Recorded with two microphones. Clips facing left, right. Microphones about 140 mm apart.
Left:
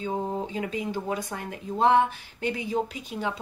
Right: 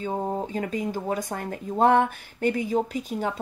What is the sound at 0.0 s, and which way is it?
Speech, 45° right (ahead or behind).